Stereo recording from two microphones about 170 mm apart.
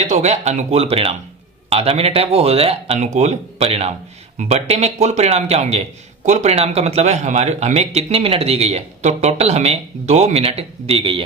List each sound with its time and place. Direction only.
0.0 s a man's voice: 40° right (ahead or behind)